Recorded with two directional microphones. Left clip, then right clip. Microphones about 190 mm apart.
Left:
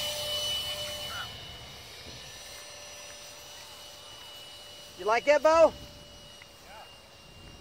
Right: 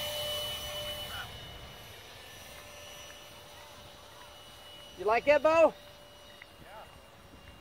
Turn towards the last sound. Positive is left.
turn(degrees=-30)  # may be behind; listen again after turning